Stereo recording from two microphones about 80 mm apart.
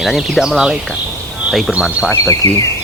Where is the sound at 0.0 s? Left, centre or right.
Centre.